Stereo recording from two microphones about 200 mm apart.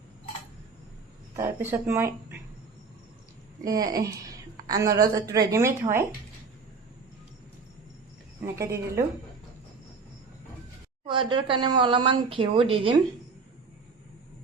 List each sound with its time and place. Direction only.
1.4 s a woman's voice: 15° right (ahead or behind)
3.6 s a woman's voice: 15° right (ahead or behind)
8.4 s a woman's voice: 15° right (ahead or behind)
11.0 s speech: 25° right (ahead or behind)